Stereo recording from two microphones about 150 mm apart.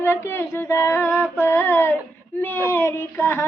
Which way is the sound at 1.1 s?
10° right (ahead or behind).